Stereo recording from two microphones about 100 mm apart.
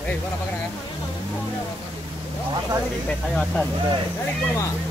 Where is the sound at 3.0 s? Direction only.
10° left (ahead or behind).